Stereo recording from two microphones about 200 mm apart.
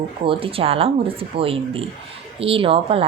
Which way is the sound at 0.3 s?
25° right (ahead or behind).